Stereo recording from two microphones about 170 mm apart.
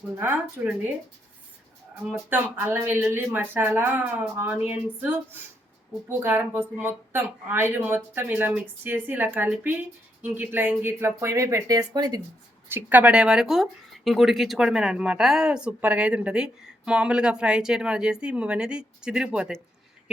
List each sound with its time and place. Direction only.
0.2 s speech: 10° right (ahead or behind)
2.0 s speech: 10° right (ahead or behind)
12.6 s speech: 10° right (ahead or behind)